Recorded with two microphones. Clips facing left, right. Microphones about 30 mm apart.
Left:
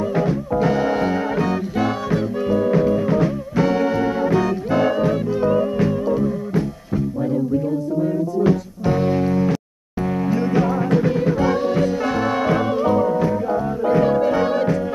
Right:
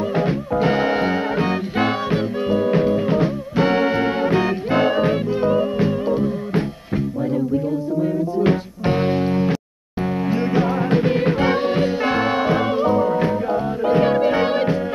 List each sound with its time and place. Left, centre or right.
0.1 s music: right
8.5 s music: right; by 13.1 s centre
13.1 s music: right